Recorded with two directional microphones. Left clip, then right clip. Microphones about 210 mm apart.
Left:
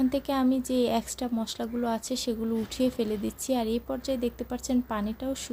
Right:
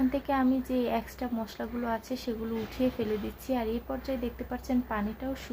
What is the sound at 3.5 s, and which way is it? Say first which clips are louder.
A woman's voice: left 3 dB; 40° left (ahead or behind).